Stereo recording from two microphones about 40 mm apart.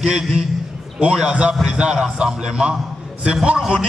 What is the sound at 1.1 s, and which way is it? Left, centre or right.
A man's voice, centre.